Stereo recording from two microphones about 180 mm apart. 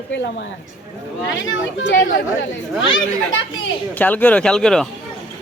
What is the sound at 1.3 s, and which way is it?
Speech, 85° left.